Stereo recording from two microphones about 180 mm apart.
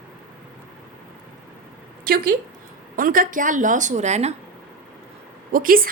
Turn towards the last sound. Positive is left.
turn(degrees=-50)  # may be behind; listen again after turning